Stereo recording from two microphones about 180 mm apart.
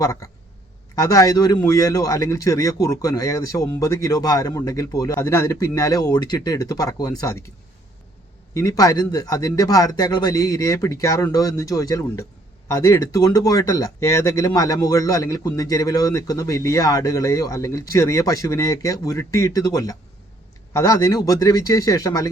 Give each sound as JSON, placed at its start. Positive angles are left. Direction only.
{"t": 0.0, "sound": "speech", "side_deg": 20}
{"t": 8.5, "sound": "speech", "side_deg": 20}